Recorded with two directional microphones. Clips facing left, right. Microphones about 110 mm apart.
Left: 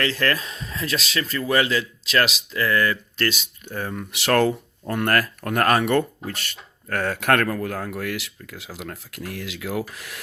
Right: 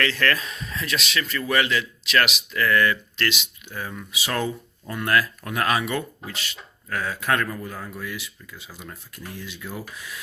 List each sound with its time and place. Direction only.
0.0 s speech: 30° left (ahead or behind)
4.1 s speech: 70° left (ahead or behind)